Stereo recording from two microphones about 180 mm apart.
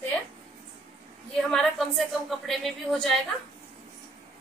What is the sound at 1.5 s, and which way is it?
A woman's voice, centre (ahead or behind).